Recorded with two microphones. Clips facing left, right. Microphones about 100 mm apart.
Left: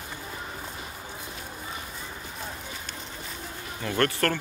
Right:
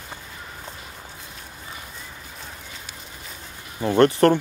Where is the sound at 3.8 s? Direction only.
20° right (ahead or behind).